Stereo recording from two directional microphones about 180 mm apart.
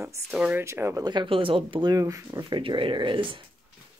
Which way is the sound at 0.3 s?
5° right (ahead or behind).